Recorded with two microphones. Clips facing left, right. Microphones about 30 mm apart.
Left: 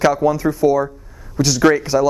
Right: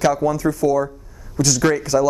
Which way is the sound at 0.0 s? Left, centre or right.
Centre.